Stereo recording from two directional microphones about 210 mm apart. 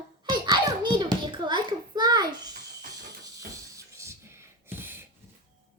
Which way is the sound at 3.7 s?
15° right (ahead or behind).